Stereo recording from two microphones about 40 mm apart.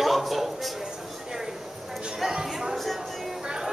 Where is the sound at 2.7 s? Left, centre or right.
Centre.